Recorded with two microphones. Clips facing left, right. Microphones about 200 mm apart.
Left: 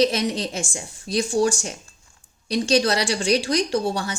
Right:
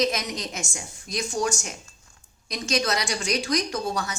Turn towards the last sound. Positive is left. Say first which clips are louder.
# left 5 dB
turn(degrees=30)  # may be behind; listen again after turning